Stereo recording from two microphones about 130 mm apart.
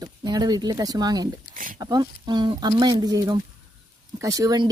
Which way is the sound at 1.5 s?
90° right.